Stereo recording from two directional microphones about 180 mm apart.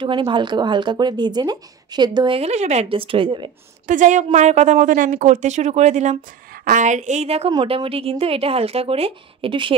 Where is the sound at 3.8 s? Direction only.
45° right (ahead or behind).